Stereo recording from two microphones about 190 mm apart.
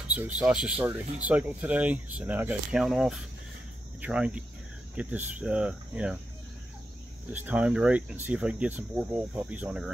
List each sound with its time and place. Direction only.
0.4 s speech: 5° right (ahead or behind)
7.3 s speech: 10° right (ahead or behind)